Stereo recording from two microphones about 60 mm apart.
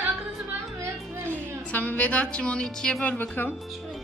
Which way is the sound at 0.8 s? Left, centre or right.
Right.